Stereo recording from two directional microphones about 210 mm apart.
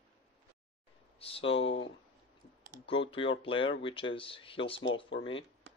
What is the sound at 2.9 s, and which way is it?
Speech, 25° left (ahead or behind).